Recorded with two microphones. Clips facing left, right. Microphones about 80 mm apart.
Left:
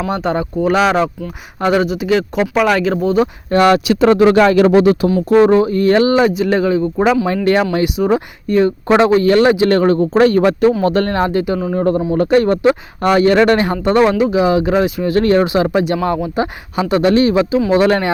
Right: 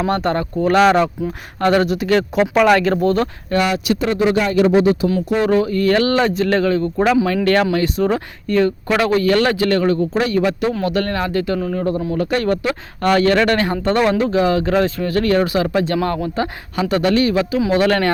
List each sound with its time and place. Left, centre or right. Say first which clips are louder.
0.1 s speech: left 1 dB; centre
3.5 s speech: left 5 dB; left
4.0 s speech: left 9 dB; left
5.4 s speech: left 5 dB; left
9.6 s speech: left 4 dB; left; by 11.8 s centre
11.8 s speech: left 5 dB; left; by 15.1 s centre
15.1 s speech: left 4 dB; left